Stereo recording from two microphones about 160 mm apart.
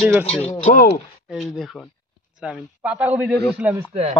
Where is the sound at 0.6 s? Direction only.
60° left (ahead or behind).